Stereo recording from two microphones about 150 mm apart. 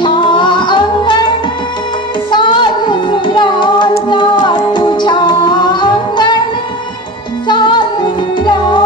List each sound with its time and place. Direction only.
0.0 s music: 30° left (ahead or behind)
2.3 s music: 30° left (ahead or behind)
7.4 s music: 30° left (ahead or behind)